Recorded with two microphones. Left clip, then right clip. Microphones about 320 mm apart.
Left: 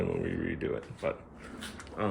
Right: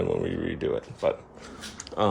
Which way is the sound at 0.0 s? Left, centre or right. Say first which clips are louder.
Right 5 dB; centre.